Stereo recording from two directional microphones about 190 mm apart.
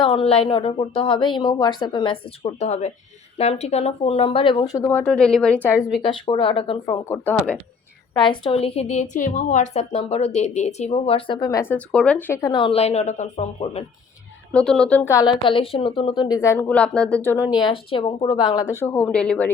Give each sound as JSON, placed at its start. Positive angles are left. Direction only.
{"t": 0.0, "sound": "a woman's voice", "side_deg": 30}
{"t": 6.0, "sound": "a woman's voice", "side_deg": 25}
{"t": 6.9, "sound": "speech", "side_deg": 10}
{"t": 8.1, "sound": "a woman's voice", "side_deg": 25}
{"t": 14.5, "sound": "speech", "side_deg": 5}
{"t": 17.6, "sound": "speech", "side_deg": 25}